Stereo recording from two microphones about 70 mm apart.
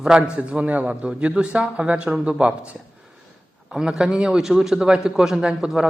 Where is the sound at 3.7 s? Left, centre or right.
Centre.